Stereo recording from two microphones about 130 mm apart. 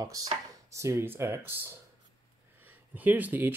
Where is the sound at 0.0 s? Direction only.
30° right (ahead or behind).